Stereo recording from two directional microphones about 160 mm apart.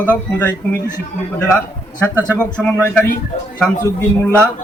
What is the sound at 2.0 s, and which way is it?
Speech, 10° left (ahead or behind).